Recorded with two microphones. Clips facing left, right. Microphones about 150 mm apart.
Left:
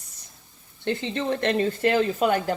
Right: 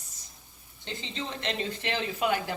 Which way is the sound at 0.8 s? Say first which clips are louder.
Left 11 dB; 60° left (ahead or behind).